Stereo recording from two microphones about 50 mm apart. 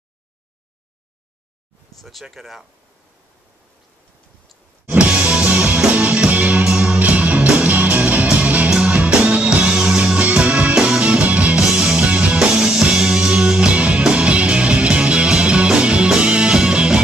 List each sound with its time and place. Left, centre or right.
2.0 s speech: centre
4.9 s music: right
6.6 s music: centre
7.0 s music: right